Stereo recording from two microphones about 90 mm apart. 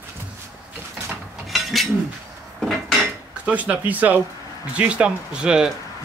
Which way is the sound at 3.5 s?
15° right (ahead or behind).